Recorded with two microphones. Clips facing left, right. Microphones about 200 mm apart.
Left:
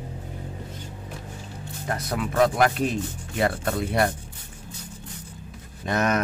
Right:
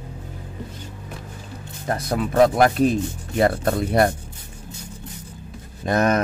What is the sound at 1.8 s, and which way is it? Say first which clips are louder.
Speech: right 5 dB; 35° right (ahead or behind).